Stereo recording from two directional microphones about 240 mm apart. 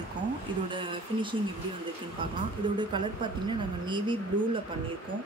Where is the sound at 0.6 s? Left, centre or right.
Right.